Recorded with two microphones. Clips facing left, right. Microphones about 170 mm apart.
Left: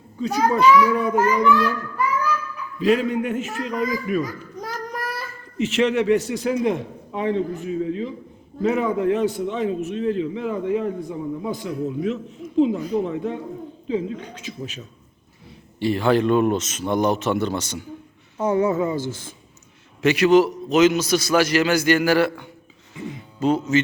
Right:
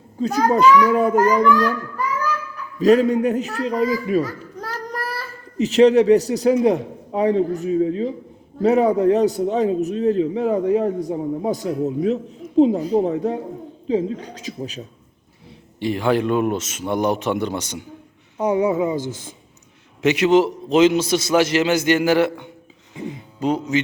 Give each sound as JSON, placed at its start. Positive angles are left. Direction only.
{"t": 0.2, "sound": "a man's voice", "side_deg": -40}
{"t": 2.7, "sound": "a man's voice", "side_deg": -40}
{"t": 15.8, "sound": "a man's voice", "side_deg": -15}
{"t": 23.0, "sound": "music", "side_deg": -15}